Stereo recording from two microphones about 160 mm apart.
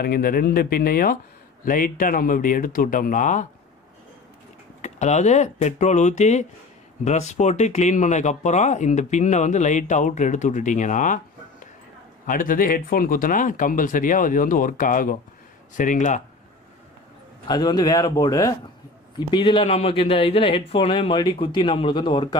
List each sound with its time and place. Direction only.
0.0 s speech: 70° left (ahead or behind); by 3.4 s 55° left (ahead or behind)
4.8 s speech: 45° left (ahead or behind)
12.3 s speech: 60° left (ahead or behind)
17.5 s a man's voice: 25° left (ahead or behind)